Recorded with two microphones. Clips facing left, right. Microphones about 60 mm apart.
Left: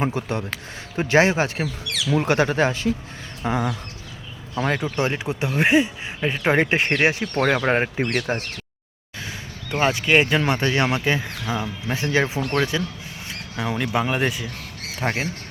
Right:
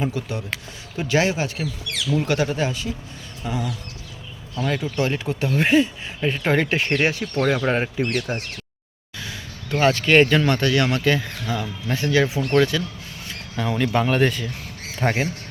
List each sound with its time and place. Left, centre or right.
0.0 s a man's voice: left
9.8 s a man's voice: centre